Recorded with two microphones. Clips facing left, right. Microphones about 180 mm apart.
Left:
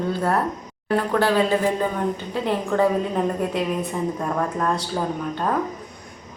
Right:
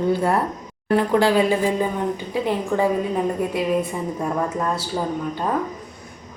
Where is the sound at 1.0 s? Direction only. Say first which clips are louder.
Right 2 dB; 10° right (ahead or behind).